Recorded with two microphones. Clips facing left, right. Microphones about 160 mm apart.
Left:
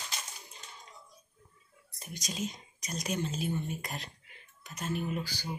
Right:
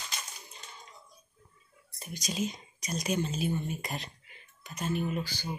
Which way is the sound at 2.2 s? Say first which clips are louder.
Right 4 dB; centre (ahead or behind).